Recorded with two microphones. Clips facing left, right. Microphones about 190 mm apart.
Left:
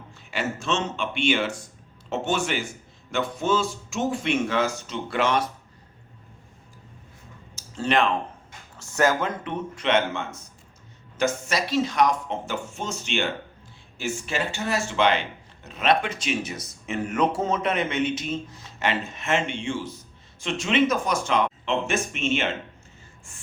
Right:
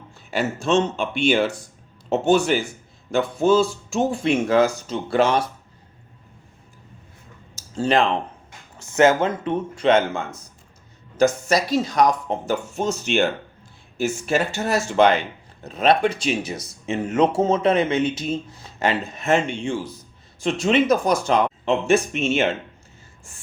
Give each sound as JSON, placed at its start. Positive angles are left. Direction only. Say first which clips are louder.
{"t": 0.3, "sound": "speech", "louder": "right 6 dB", "side_deg": -35}
{"t": 7.5, "sound": "speech", "louder": "right 4 dB", "side_deg": -35}
{"t": 8.8, "sound": "speech", "louder": "right 6 dB", "side_deg": -20}